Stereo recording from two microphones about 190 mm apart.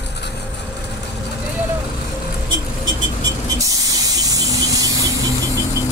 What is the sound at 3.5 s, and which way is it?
Spray, 20° right (ahead or behind).